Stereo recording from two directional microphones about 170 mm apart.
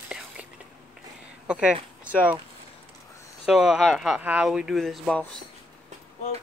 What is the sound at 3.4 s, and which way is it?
Speech, 5° right (ahead or behind).